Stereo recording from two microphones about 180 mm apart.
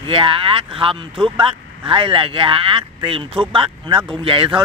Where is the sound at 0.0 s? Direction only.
30° right (ahead or behind).